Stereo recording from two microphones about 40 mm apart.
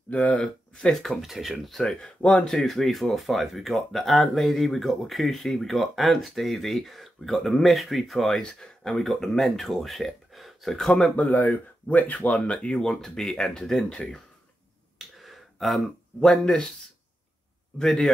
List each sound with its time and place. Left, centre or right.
0.1 s speech: left
0.4 s speech: left
0.9 s speech: centre
1.6 s speech: centre
2.5 s speech: centre
8.4 s speech: centre
9.2 s speech: centre
11.1 s speech: left
12.5 s speech: centre
13.8 s speech: left
15.0 s a sound: centre
17.7 s speech: centre